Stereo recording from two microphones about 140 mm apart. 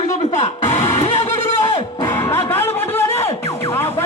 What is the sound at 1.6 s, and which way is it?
Music, 40° left (ahead or behind).